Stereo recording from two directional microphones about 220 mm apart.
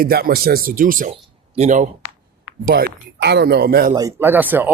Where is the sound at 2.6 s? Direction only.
45° right (ahead or behind).